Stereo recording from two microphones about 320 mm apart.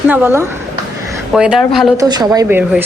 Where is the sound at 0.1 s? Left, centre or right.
Centre.